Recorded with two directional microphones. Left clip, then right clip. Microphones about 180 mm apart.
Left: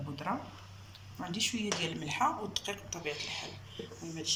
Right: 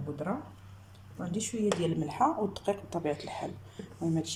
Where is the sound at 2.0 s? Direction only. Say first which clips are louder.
Right 3 dB; 45° right (ahead or behind).